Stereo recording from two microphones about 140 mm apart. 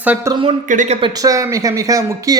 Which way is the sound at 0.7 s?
65° right (ahead or behind).